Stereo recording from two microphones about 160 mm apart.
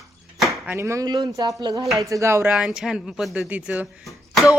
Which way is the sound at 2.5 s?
5° right (ahead or behind).